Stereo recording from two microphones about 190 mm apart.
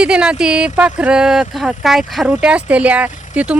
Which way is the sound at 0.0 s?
5° right (ahead or behind).